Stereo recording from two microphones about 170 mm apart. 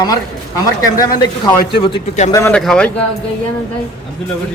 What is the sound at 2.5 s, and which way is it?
Speech, 5° left (ahead or behind).